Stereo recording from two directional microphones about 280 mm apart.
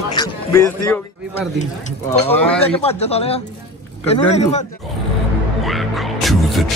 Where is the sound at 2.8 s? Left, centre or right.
Left.